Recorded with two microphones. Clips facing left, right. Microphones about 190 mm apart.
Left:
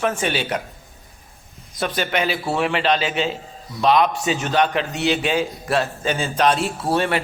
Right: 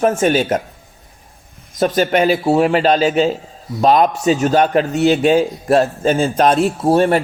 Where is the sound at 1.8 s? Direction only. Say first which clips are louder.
Right 8 dB; 40° right (ahead or behind).